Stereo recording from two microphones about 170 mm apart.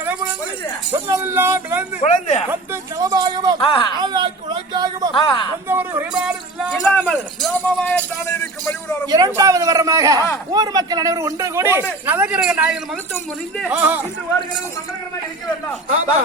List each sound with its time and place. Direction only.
0.9 s speech: 15° right (ahead or behind)
2.0 s speech: 35° left (ahead or behind)
3.0 s a man's voice: 20° right (ahead or behind)
3.6 s speech: 30° left (ahead or behind)
4.0 s a sound: 25° right (ahead or behind)
5.1 s speech: 30° left (ahead or behind)
5.6 s speech: 15° right (ahead or behind)
6.7 s speech: 10° left (ahead or behind)
8.6 s vehicle: 10° left (ahead or behind)
9.0 s a man's voice: 20° right (ahead or behind)